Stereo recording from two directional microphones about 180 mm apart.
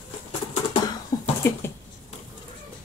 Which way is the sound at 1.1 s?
20° left (ahead or behind).